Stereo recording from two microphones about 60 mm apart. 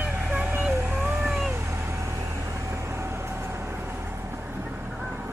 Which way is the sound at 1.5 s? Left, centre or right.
Right.